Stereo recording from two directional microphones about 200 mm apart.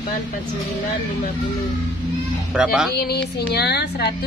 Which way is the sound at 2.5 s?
5° right (ahead or behind).